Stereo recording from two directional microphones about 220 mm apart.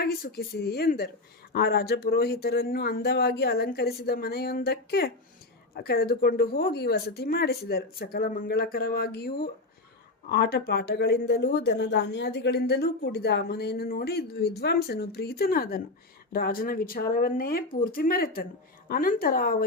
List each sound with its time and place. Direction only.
0.0 s speech: 45° left (ahead or behind)